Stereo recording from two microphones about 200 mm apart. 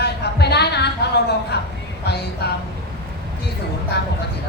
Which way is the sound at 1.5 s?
55° left (ahead or behind).